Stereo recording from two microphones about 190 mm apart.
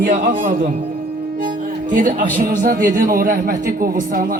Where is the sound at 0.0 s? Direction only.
45° right (ahead or behind).